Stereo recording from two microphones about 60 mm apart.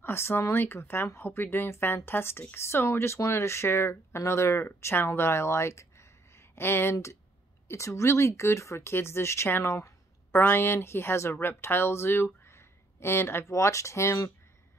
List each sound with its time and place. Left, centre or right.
0.0 s a woman's voice: left
10.3 s a woman's voice: left
12.4 s a sound: left
13.5 s speech: left